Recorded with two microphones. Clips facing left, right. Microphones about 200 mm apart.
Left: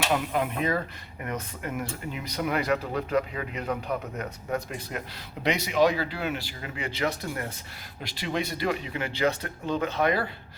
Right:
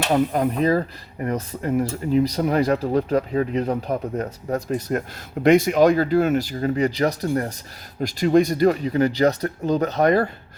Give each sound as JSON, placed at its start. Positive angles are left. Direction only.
{"t": 0.1, "sound": "speech", "side_deg": -40}